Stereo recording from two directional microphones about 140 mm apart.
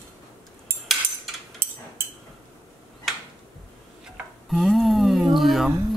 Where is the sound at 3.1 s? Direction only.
Centre (ahead or behind).